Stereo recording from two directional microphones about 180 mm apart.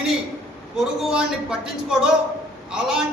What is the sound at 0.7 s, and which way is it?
A man's voice, 5° right (ahead or behind).